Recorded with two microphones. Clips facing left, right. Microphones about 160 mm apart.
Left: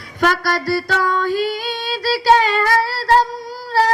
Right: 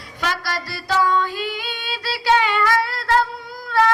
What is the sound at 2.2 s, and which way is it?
Child singing, 40° left (ahead or behind).